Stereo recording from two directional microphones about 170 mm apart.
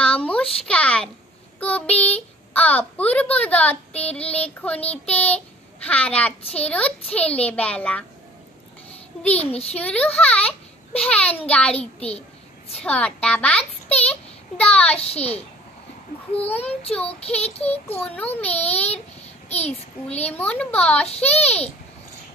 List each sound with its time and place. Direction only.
0.0 s a child's voice: 5° left (ahead or behind)
9.4 s a child's voice: 35° left (ahead or behind)
9.7 s a child's voice: 10° left (ahead or behind)
12.8 s a child's voice: 5° left (ahead or behind)
15.0 s a child's voice: 35° left (ahead or behind)
16.3 s a child's voice: 10° left (ahead or behind)
17.0 s a child's voice: 35° left (ahead or behind)
17.6 s a child's voice: 10° left (ahead or behind)
18.5 s a child's voice: 35° left (ahead or behind)
18.9 s child singing: 40° left (ahead or behind)
20.2 s a child's voice: 10° left (ahead or behind)
21.1 s a child's voice: 40° left (ahead or behind)